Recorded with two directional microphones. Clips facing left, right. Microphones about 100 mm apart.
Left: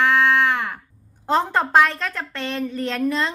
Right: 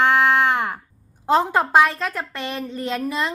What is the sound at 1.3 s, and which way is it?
A woman's voice, 10° right (ahead or behind).